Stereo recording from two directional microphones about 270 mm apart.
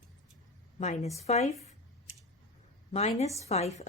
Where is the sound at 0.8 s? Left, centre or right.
Left.